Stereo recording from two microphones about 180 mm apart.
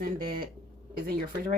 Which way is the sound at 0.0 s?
55° right (ahead or behind).